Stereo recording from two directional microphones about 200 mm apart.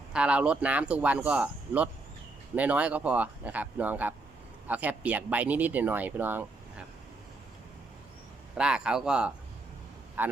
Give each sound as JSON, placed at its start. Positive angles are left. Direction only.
{"t": 0.1, "sound": "speech", "side_deg": -5}
{"t": 8.5, "sound": "speech", "side_deg": -5}